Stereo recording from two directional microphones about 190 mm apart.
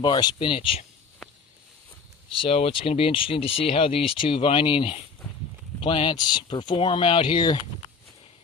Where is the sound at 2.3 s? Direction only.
30° left (ahead or behind).